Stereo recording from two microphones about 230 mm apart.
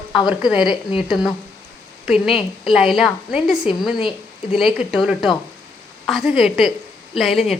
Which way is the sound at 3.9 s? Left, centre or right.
Left.